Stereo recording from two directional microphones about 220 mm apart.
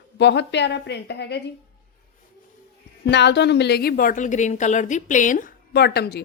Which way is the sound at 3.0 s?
50° left (ahead or behind).